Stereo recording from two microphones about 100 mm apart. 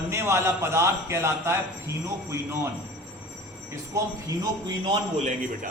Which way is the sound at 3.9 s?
40° right (ahead or behind).